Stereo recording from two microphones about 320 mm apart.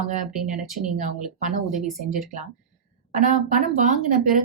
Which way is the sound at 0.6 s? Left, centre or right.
Centre.